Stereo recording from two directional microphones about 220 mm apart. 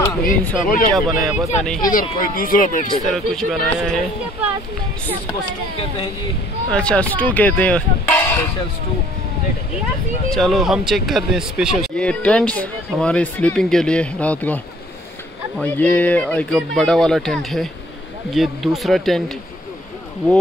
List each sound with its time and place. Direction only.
0.7 s speech: 40° left (ahead or behind)
0.9 s speech: centre (ahead or behind)
1.8 s speech: 40° left (ahead or behind)
3.1 s speech: centre (ahead or behind)
6.7 s speech: 5° left (ahead or behind)
10.3 s speech: centre (ahead or behind)
15.6 s speech: 10° left (ahead or behind)